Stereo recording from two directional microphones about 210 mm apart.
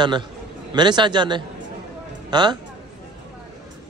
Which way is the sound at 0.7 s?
20° right (ahead or behind).